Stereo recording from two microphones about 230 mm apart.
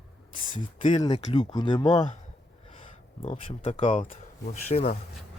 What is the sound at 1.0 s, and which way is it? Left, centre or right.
Speech, left.